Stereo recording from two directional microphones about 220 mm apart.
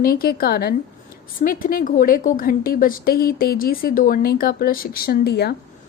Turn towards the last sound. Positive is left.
turn(degrees=45)  # may be behind; listen again after turning